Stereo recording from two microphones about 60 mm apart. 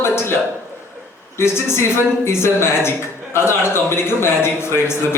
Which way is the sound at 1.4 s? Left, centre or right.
Left.